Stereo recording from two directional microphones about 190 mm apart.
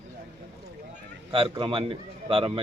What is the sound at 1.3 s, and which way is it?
A man's voice, 25° right (ahead or behind).